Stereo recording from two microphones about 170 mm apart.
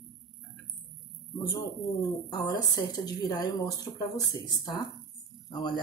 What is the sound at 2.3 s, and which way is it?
Speech, 25° left (ahead or behind).